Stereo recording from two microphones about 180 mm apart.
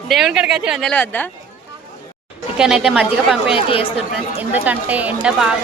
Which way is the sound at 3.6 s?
30° left (ahead or behind).